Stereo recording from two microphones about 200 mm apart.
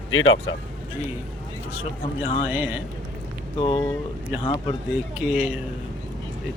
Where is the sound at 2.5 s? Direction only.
10° right (ahead or behind).